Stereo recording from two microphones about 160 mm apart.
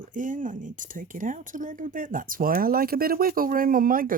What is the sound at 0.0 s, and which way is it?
Speech, 55° right (ahead or behind).